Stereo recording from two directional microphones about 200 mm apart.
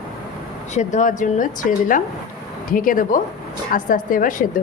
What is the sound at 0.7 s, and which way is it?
A woman's voice, 40° left (ahead or behind).